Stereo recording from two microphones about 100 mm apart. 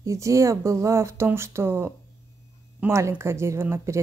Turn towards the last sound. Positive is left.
turn(degrees=-25)  # may be behind; listen again after turning